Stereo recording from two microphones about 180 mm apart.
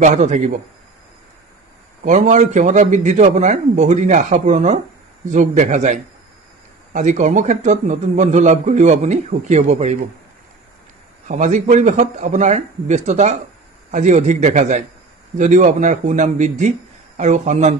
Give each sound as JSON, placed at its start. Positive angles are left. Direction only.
{"t": 0.0, "sound": "a man's voice", "side_deg": -40}
{"t": 2.0, "sound": "a man's voice", "side_deg": -40}
{"t": 11.2, "sound": "a man's voice", "side_deg": -45}